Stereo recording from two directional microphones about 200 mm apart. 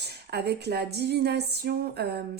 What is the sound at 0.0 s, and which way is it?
Music, 55° right (ahead or behind).